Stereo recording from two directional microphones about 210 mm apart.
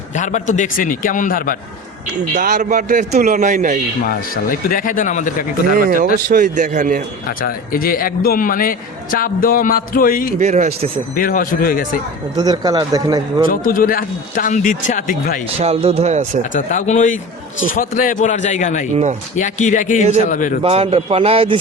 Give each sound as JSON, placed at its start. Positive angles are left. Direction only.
{"t": 0.1, "sound": "speech", "side_deg": 35}
{"t": 2.3, "sound": "a man's voice", "side_deg": -40}
{"t": 4.0, "sound": "speech", "side_deg": 40}
{"t": 6.2, "sound": "a man's voice", "side_deg": -40}
{"t": 7.3, "sound": "a man's voice", "side_deg": 45}
{"t": 10.3, "sound": "a man's voice", "side_deg": -35}
{"t": 11.1, "sound": "speech", "side_deg": 40}
{"t": 12.4, "sound": "a man's voice", "side_deg": -20}
{"t": 13.5, "sound": "speech", "side_deg": 45}
{"t": 15.5, "sound": "a man's voice", "side_deg": -30}
{"t": 16.6, "sound": "speech", "side_deg": 35}
{"t": 20.6, "sound": "a man's voice", "side_deg": -30}